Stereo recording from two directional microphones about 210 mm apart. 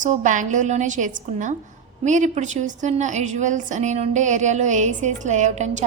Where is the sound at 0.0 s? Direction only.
35° right (ahead or behind).